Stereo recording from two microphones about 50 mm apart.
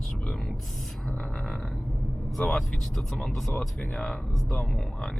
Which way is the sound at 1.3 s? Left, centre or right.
Centre.